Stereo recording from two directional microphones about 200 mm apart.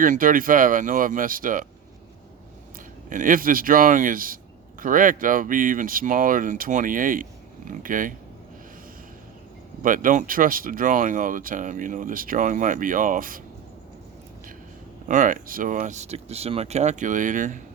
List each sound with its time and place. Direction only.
0.0 s speech: 40° right (ahead or behind)
3.1 s speech: 40° right (ahead or behind)
9.8 s speech: 40° right (ahead or behind)
15.0 s speech: 40° right (ahead or behind)